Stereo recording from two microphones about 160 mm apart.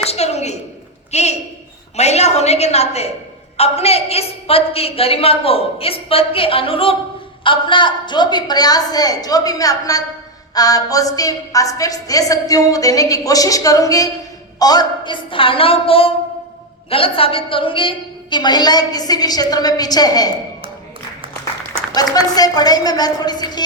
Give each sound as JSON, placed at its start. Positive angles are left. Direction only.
{"t": 0.0, "sound": "a sound", "side_deg": 40}
{"t": 1.1, "sound": "a woman's voice", "side_deg": 45}
{"t": 22.4, "sound": "a woman's voice", "side_deg": 25}